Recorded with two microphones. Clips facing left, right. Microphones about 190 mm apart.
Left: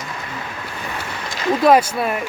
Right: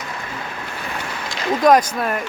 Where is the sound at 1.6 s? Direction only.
10° left (ahead or behind).